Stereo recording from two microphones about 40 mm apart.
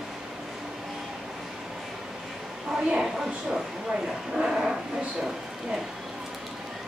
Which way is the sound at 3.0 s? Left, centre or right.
Centre.